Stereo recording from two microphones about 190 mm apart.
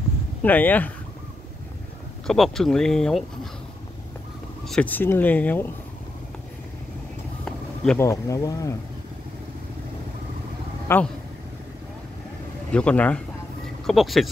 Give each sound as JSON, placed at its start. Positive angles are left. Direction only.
{"t": 0.4, "sound": "speech", "side_deg": 10}
{"t": 2.2, "sound": "speech", "side_deg": 0}
{"t": 4.6, "sound": "speech", "side_deg": 5}
{"t": 7.4, "sound": "a sound", "side_deg": 5}
{"t": 8.0, "sound": "speech", "side_deg": 15}
{"t": 10.9, "sound": "speech", "side_deg": 15}
{"t": 12.7, "sound": "speech", "side_deg": 5}